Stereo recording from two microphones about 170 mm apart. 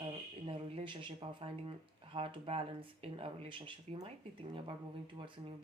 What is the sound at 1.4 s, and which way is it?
Speech, 30° right (ahead or behind).